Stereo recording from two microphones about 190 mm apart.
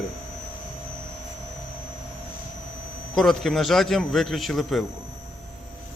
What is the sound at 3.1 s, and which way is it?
A man's voice, centre (ahead or behind).